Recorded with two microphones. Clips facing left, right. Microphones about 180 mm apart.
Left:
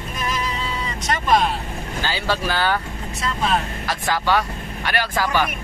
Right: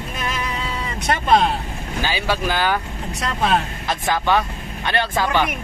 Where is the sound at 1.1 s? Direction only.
60° right (ahead or behind).